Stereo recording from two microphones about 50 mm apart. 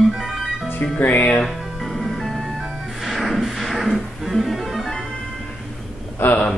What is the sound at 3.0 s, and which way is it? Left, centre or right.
Music, centre.